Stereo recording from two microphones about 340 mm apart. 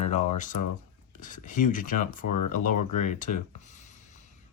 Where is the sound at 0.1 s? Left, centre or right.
Left.